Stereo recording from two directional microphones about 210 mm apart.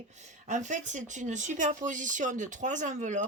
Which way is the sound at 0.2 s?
35° right (ahead or behind).